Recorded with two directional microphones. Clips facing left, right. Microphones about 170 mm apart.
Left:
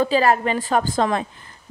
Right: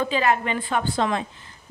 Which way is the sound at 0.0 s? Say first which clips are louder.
Left 4 dB; 40° left (ahead or behind).